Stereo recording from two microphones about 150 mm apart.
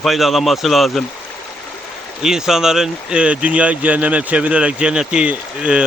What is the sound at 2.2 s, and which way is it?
Speech, 5° right (ahead or behind).